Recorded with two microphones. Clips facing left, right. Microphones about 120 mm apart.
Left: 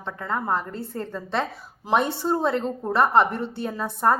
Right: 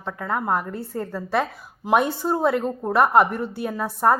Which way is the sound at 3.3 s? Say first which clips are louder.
Right 1 dB; 25° left (ahead or behind).